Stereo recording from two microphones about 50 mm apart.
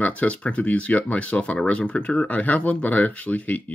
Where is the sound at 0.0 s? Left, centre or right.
Left.